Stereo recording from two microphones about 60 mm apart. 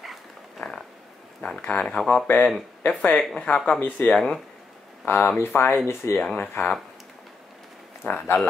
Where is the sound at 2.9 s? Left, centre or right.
Centre.